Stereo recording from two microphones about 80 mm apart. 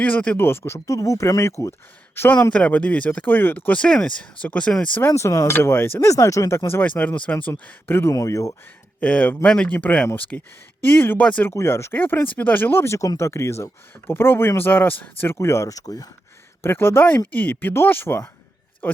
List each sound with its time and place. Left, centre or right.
0.0 s speech: centre
0.3 s speech: left
0.9 s speech: left
2.5 s speech: centre
5.0 s speech: left
5.5 s speech: left
6.8 s speech: centre
8.1 s speech: left
9.0 s speech: centre
11.2 s speech: centre
11.4 s speech: left
15.4 s speech: left
16.6 s speech: left